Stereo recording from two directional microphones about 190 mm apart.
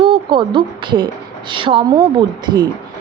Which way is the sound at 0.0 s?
25° right (ahead or behind).